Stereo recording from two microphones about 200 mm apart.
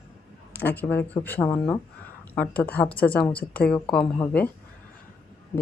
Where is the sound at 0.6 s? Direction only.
10° left (ahead or behind).